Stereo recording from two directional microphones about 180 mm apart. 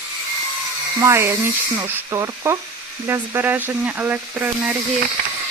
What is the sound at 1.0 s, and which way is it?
Speech, 15° right (ahead or behind).